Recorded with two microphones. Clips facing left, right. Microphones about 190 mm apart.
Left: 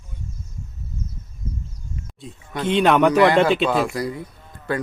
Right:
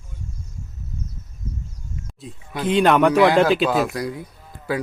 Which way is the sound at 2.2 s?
Centre (ahead or behind).